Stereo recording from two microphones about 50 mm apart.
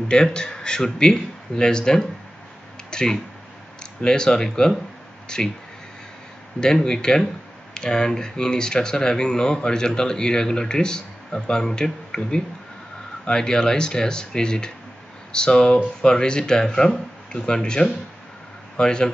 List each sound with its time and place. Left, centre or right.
0.1 s speech: centre
6.6 s speech: centre